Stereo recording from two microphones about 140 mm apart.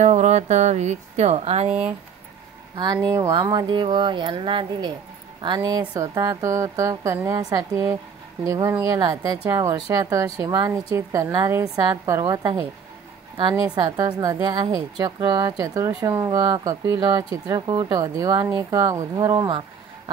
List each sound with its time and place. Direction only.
0.0 s speech: 55° right (ahead or behind)
1.7 s speech: 10° right (ahead or behind)
2.7 s a woman's voice: 30° right (ahead or behind)
13.4 s a woman's voice: 35° right (ahead or behind)